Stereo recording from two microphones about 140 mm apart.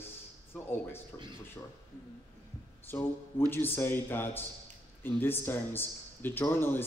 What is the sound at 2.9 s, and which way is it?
A man's voice, 15° left (ahead or behind).